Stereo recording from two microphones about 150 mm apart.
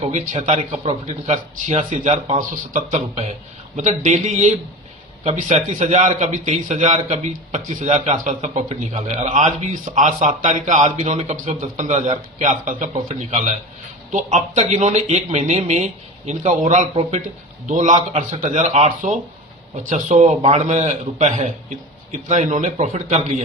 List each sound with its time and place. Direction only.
0.1 s a man's voice: 50° right (ahead or behind)
12.9 s a man's voice: 50° right (ahead or behind)